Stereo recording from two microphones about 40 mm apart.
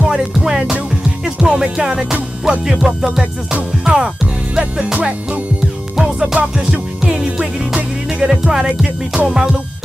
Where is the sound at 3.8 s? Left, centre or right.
Centre.